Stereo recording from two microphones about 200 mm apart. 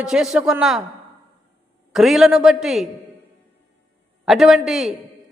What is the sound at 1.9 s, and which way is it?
Speech, centre (ahead or behind).